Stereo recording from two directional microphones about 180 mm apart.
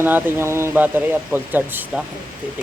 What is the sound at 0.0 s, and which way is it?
A man's voice, 10° right (ahead or behind).